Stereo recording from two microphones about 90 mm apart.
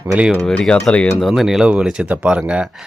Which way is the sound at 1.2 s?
Centre (ahead or behind).